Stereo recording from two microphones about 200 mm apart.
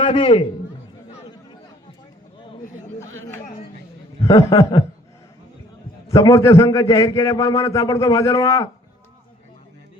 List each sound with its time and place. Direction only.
0.0 s a man's voice: 25° left (ahead or behind)
4.3 s a man's voice: 15° left (ahead or behind)
6.1 s a man's voice: 15° left (ahead or behind)